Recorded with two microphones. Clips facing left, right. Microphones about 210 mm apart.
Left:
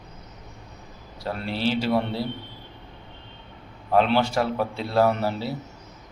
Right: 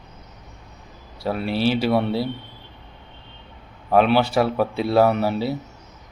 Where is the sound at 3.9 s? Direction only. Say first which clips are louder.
Right 3 dB; 15° right (ahead or behind).